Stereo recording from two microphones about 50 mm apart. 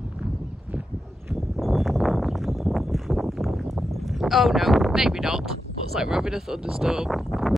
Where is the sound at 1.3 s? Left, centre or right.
Centre.